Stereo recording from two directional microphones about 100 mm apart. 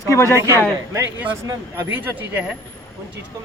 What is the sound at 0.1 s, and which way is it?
Speech, 30° left (ahead or behind).